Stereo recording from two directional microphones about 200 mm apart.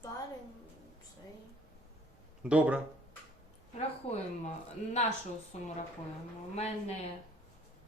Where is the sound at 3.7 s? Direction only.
30° left (ahead or behind).